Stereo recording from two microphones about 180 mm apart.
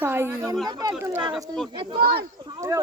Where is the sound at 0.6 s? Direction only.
20° right (ahead or behind).